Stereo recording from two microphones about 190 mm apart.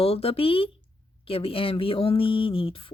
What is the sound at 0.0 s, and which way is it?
Speech, 30° left (ahead or behind).